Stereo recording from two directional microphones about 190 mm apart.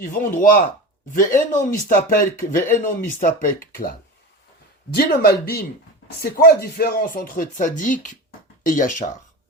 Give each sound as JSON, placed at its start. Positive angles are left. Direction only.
{"t": 0.0, "sound": "speech", "side_deg": 45}
{"t": 4.9, "sound": "speech", "side_deg": 55}